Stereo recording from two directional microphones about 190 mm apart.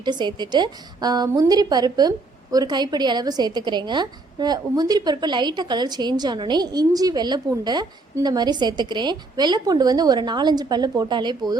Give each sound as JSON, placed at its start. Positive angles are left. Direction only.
{"t": 0.0, "sound": "a woman's voice", "side_deg": -25}